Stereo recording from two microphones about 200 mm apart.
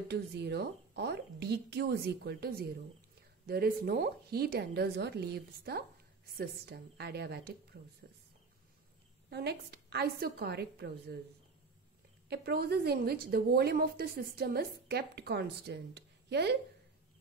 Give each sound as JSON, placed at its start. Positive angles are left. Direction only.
{"t": 0.1, "sound": "a woman's voice", "side_deg": -55}
{"t": 9.3, "sound": "a woman's voice", "side_deg": -55}
{"t": 12.3, "sound": "a woman's voice", "side_deg": -55}